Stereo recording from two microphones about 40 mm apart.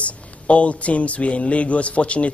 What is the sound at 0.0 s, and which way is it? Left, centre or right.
Speech, left.